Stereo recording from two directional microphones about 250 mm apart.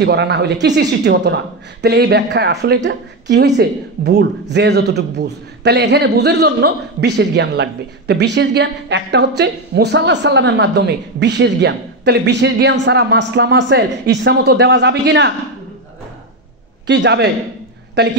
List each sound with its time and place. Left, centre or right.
0.0 s a man's voice: right
16.8 s a man's voice: right